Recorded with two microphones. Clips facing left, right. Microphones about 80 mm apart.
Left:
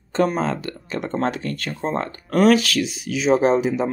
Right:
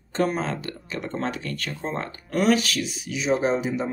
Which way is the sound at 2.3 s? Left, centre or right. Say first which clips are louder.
Left 5 dB; left.